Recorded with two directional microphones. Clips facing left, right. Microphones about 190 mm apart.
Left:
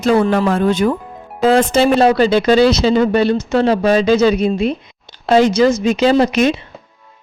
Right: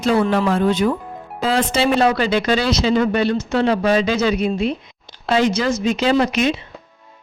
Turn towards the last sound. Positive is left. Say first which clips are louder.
# left 4 dB
turn(degrees=35)  # may be behind; listen again after turning